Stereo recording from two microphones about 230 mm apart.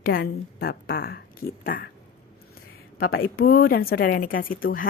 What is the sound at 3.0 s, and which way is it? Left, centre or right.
A woman's voice, left.